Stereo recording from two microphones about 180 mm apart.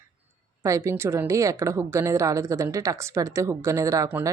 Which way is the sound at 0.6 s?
15° right (ahead or behind).